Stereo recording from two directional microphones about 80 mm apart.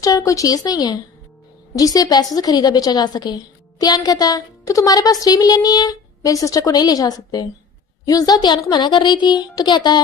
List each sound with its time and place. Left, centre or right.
0.0 s a woman's voice: left